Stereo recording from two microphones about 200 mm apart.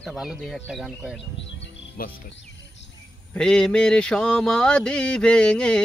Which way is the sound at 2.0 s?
45° left (ahead or behind).